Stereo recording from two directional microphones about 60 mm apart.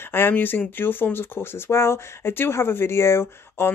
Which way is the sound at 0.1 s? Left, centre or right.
Left.